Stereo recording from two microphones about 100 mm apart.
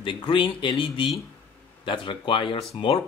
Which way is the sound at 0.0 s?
55° left (ahead or behind).